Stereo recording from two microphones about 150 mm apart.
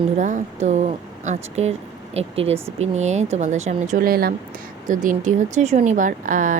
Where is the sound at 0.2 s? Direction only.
55° right (ahead or behind).